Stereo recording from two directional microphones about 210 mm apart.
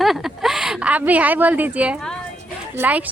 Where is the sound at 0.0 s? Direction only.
Centre (ahead or behind).